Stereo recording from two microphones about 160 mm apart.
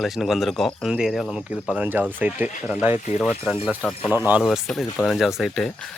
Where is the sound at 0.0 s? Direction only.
Centre (ahead or behind).